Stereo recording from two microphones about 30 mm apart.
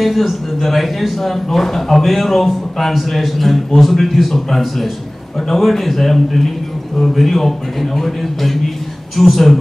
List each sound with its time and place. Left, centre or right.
0.0 s a man's voice: centre